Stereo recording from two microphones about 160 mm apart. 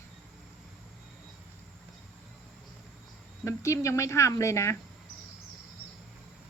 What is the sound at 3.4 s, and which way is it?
Speech, 20° left (ahead or behind).